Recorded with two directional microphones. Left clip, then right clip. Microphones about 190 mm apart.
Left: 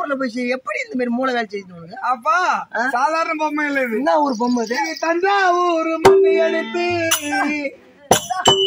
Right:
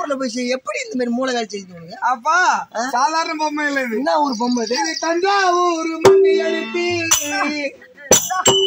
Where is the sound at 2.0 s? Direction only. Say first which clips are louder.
Right 2 dB; 20° left (ahead or behind).